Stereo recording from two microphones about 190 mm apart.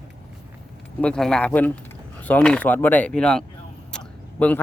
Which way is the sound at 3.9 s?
5° left (ahead or behind).